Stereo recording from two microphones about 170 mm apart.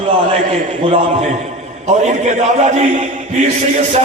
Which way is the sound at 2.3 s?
40° right (ahead or behind).